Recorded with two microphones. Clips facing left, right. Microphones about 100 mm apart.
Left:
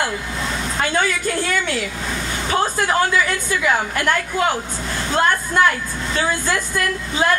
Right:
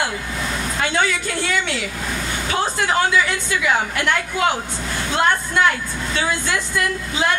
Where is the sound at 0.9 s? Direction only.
45° left (ahead or behind).